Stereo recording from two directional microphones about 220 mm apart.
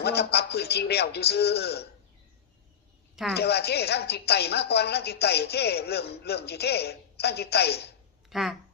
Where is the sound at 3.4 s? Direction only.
45° left (ahead or behind).